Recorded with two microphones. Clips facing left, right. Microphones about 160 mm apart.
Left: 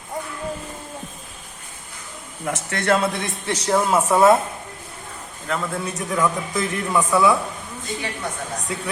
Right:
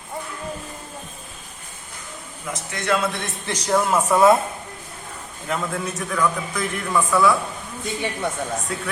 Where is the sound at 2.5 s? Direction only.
65° left (ahead or behind).